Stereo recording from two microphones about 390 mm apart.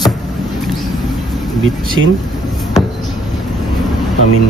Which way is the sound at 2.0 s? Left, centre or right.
Right.